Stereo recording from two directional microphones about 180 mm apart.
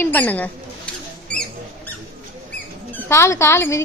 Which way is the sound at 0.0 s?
10° left (ahead or behind).